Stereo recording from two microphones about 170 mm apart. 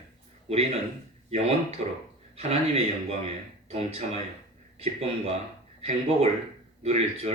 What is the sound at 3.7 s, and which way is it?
Speech, 35° right (ahead or behind).